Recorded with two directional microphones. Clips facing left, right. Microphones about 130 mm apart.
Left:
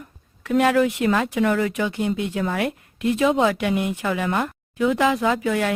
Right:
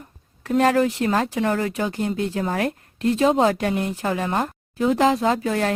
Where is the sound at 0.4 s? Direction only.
40° right (ahead or behind).